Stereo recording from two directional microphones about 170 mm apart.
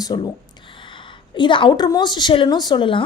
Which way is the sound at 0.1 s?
25° left (ahead or behind).